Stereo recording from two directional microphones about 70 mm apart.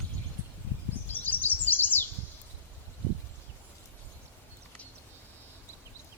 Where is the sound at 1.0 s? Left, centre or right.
Left.